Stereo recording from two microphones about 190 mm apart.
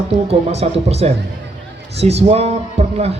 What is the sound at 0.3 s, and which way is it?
A man's voice, 35° right (ahead or behind).